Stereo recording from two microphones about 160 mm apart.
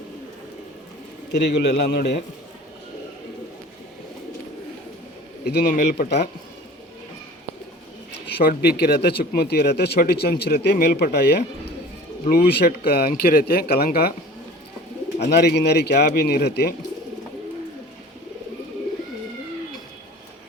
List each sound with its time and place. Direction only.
1.4 s speech: 90° left
5.5 s speech: 90° left
8.3 s speech: 85° left
12.2 s speech: 70° left (ahead or behind)
15.2 s speech: 90° left